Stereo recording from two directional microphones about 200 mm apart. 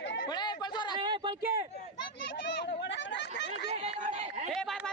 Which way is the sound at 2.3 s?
60° left (ahead or behind).